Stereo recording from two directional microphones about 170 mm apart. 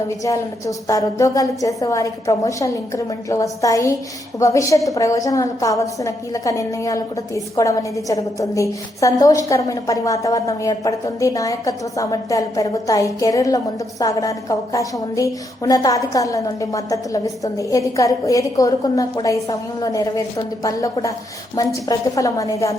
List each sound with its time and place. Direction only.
0.3 s a woman's voice: 20° left (ahead or behind)